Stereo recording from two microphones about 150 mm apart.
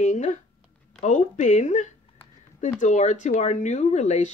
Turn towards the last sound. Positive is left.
turn(degrees=50)  # may be behind; listen again after turning